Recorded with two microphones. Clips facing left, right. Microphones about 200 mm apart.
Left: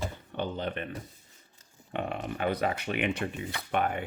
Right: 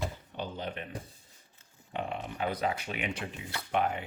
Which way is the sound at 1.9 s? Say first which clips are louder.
Left 3 dB; 60° left (ahead or behind).